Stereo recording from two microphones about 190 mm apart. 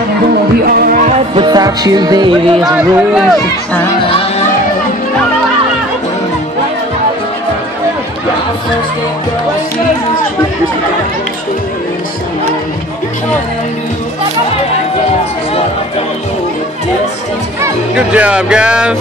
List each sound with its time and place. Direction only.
0.7 s music: 50° right (ahead or behind)
1.4 s music: 20° right (ahead or behind)
2.6 s speech: 5° right (ahead or behind)
4.1 s a sound: 30° left (ahead or behind)
17.9 s speech: 5° right (ahead or behind)